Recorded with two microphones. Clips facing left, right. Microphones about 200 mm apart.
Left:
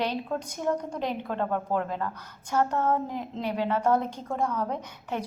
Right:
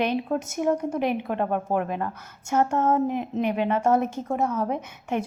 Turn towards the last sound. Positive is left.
turn(degrees=-20)  # may be behind; listen again after turning